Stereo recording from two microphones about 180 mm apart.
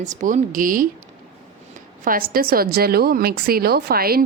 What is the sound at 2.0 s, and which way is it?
A woman's voice, 55° right (ahead or behind).